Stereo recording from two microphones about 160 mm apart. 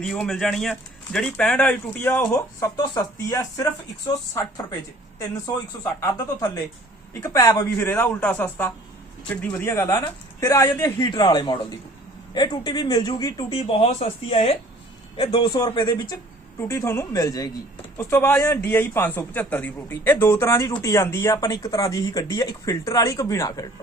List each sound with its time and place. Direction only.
0.0 s speech: 5° left (ahead or behind)
2.7 s speech: 25° left (ahead or behind)
5.8 s a man's voice: 20° left (ahead or behind)
13.5 s speech: 40° left (ahead or behind)
16.6 s speech: 15° left (ahead or behind)
17.9 s a man's voice: 10° left (ahead or behind)